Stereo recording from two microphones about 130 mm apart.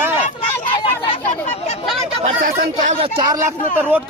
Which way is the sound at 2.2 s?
80° right.